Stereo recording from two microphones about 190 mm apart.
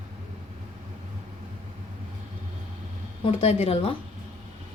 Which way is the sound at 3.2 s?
30° left (ahead or behind).